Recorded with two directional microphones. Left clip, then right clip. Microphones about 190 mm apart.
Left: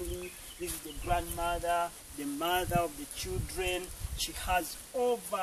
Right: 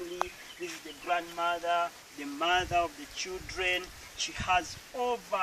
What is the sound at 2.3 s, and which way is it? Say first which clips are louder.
Speech: right 3 dB; 10° left (ahead or behind).